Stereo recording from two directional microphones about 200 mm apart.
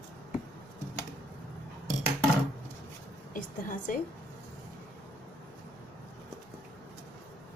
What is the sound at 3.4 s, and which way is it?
Speech, 45° left (ahead or behind).